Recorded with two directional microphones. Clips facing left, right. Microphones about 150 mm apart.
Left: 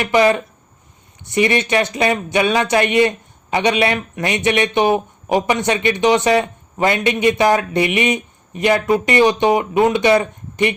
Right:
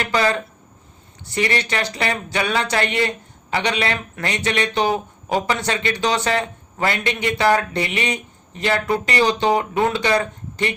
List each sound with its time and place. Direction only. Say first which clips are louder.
0.0 s speech: left 6 dB; 15° left (ahead or behind)